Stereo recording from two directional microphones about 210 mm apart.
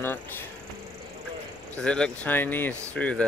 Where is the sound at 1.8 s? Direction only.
5° left (ahead or behind).